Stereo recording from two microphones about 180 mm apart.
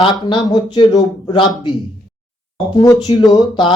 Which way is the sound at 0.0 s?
25° left (ahead or behind).